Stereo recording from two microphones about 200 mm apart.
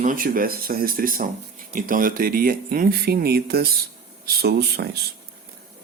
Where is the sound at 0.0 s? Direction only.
45° right (ahead or behind).